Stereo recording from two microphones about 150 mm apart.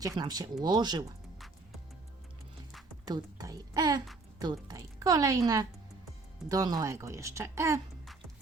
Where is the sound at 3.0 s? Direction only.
25° right (ahead or behind).